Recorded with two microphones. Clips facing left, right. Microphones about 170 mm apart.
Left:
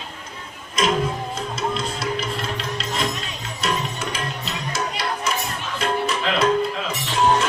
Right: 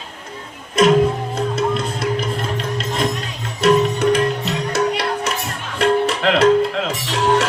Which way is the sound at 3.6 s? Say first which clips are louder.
Right 12 dB; 60° right (ahead or behind).